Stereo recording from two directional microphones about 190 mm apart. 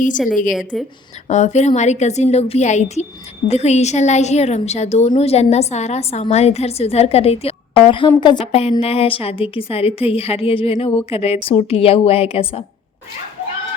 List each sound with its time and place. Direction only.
0.7 s a woman's voice: centre (ahead or behind)
1.3 s a woman's voice: 35° left (ahead or behind)